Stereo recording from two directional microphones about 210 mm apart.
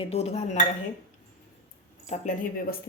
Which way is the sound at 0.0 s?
30° left (ahead or behind).